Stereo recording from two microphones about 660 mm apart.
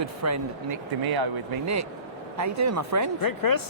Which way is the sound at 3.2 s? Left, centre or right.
Left.